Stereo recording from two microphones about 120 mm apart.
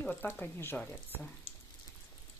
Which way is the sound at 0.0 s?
10° left (ahead or behind).